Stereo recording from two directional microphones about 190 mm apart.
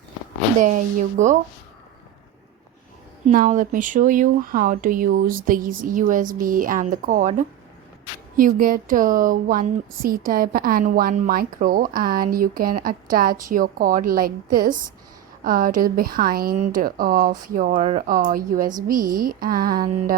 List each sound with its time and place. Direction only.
0.6 s speech: 40° right (ahead or behind)
3.2 s speech: 45° right (ahead or behind)